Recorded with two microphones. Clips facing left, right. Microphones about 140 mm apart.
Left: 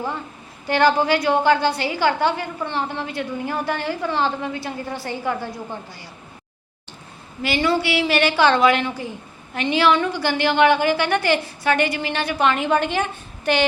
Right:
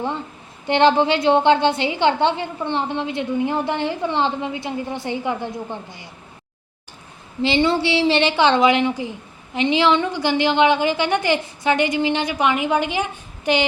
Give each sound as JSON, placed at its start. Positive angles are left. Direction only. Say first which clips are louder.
{"t": 0.6, "sound": "a woman's voice", "louder": "right 2 dB", "side_deg": -25}
{"t": 7.4, "sound": "a woman's voice", "louder": "right 2 dB", "side_deg": -25}